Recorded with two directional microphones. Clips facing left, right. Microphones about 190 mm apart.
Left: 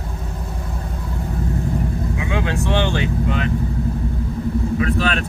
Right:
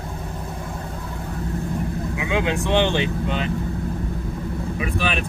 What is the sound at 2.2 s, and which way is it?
Speech, 15° right (ahead or behind).